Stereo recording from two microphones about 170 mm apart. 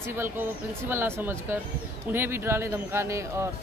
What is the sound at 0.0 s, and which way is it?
Speech, 15° right (ahead or behind).